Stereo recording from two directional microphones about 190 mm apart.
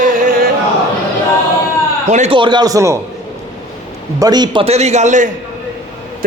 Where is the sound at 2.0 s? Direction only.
40° right (ahead or behind).